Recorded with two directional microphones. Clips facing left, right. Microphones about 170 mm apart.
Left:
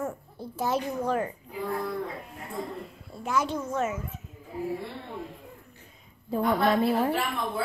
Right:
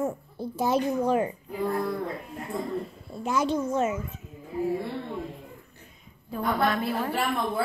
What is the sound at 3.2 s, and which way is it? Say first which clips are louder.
Speech: right 3 dB; 20° right (ahead or behind).